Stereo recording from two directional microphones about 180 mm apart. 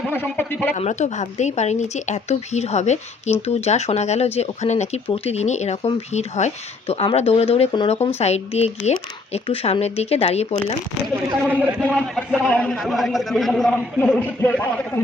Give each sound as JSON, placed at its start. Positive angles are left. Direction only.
{"t": 0.1, "sound": "speech", "side_deg": 10}
{"t": 0.8, "sound": "speech", "side_deg": 40}
{"t": 11.4, "sound": "a man's voice", "side_deg": -10}